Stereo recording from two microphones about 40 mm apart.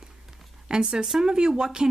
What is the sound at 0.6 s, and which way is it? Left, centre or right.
Speech, centre.